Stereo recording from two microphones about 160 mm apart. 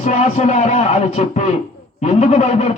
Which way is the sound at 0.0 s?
45° left (ahead or behind).